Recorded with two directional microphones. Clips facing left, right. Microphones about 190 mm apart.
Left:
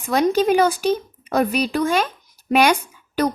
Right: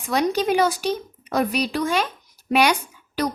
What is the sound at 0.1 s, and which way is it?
A woman's voice, 50° left (ahead or behind).